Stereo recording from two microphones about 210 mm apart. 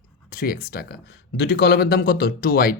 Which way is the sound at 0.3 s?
45° left (ahead or behind).